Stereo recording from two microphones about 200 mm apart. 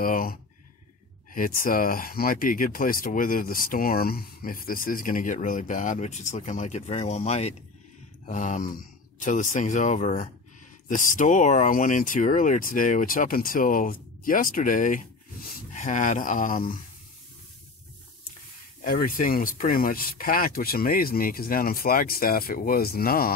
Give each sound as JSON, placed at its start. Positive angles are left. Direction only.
{"t": 0.0, "sound": "speech", "side_deg": 45}
{"t": 18.9, "sound": "speech", "side_deg": 45}